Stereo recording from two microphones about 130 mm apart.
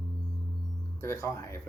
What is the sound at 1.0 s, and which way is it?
Speech, 20° left (ahead or behind).